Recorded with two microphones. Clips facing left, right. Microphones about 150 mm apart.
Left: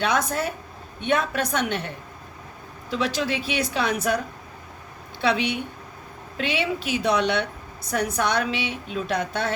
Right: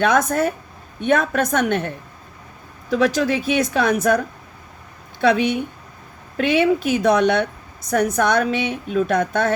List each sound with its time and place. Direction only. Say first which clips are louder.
0.0 s a woman's voice: right 6 dB; 45° right (ahead or behind)
2.9 s a woman's voice: right 7 dB; 45° right (ahead or behind)
5.2 s a woman's voice: right 6 dB; 45° right (ahead or behind)